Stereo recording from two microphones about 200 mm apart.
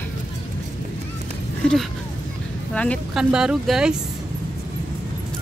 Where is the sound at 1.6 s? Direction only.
5° left (ahead or behind).